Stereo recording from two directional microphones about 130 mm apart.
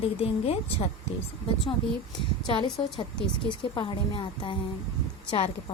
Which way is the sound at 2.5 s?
40° left (ahead or behind).